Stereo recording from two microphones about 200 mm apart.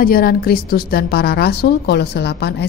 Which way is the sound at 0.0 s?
50° left (ahead or behind).